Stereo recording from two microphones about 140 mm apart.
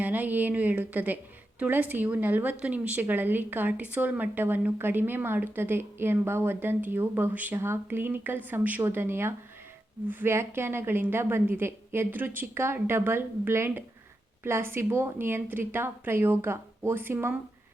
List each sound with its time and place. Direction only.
0.0 s a woman's voice: 10° right (ahead or behind)